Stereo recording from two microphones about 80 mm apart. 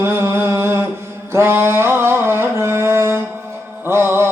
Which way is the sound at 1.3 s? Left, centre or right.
Right.